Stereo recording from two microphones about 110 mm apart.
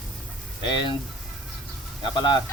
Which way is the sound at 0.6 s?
45° left (ahead or behind).